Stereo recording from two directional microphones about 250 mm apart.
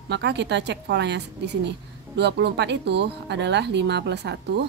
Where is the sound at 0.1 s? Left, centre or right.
Right.